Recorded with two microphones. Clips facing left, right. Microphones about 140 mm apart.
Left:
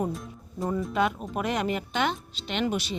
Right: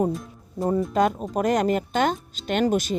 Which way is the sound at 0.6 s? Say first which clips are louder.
Right 6 dB; 25° right (ahead or behind).